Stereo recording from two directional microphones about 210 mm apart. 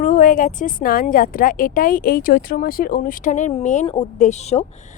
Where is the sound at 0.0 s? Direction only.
40° left (ahead or behind).